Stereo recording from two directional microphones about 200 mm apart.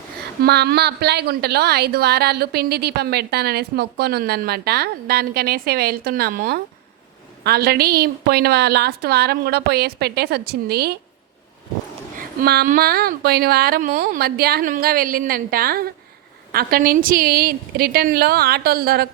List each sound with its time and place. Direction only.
0.4 s a woman's voice: 55° right (ahead or behind)
12.1 s a woman's voice: 45° right (ahead or behind)